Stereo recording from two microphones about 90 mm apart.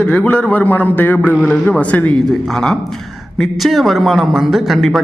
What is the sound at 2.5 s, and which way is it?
A man's voice, 5° left (ahead or behind).